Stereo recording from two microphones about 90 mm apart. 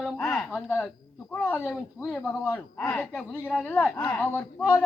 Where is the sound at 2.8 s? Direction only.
10° left (ahead or behind).